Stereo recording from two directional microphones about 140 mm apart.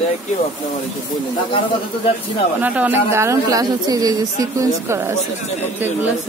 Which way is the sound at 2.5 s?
10° right (ahead or behind).